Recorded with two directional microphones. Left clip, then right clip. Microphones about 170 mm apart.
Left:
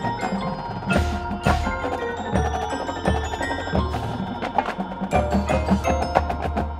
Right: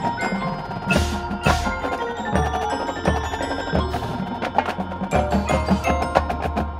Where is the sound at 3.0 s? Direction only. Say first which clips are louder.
Right 2 dB; 20° right (ahead or behind).